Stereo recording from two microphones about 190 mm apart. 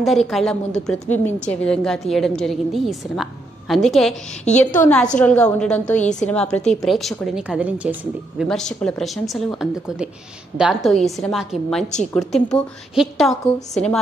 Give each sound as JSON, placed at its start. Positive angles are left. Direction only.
{"t": 0.0, "sound": "a woman's voice", "side_deg": 0}
{"t": 4.5, "sound": "a woman's voice", "side_deg": 35}
{"t": 4.7, "sound": "a woman's voice", "side_deg": 10}
{"t": 8.5, "sound": "a woman's voice", "side_deg": 5}